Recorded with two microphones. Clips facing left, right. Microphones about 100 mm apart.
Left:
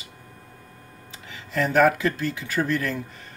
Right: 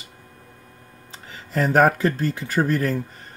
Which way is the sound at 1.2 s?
40° right (ahead or behind).